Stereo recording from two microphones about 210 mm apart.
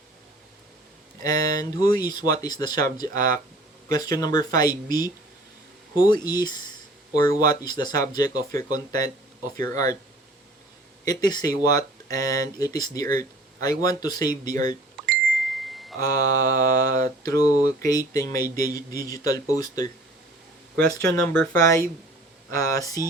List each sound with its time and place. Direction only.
1.2 s speech: 20° left (ahead or behind)
11.0 s speech: 20° left (ahead or behind)
15.0 s a sound: centre (ahead or behind)
16.0 s speech: 15° left (ahead or behind)
21.3 s speech: 15° left (ahead or behind)